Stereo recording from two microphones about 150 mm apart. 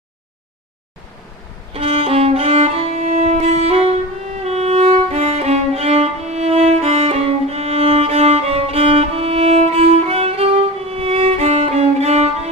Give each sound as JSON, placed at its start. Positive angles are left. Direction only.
{"t": 1.7, "sound": "violin", "side_deg": -40}
{"t": 4.5, "sound": "music", "side_deg": -45}